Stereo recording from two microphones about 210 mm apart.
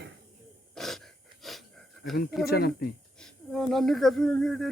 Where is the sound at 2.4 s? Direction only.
45° left (ahead or behind).